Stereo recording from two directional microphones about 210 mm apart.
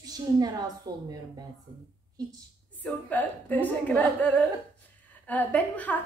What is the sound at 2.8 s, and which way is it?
A woman's voice, 10° left (ahead or behind).